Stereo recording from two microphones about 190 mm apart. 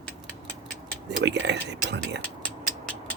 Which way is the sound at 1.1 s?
65° right (ahead or behind).